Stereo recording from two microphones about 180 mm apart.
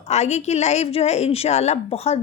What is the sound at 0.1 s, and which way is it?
A woman's voice, 40° left (ahead or behind).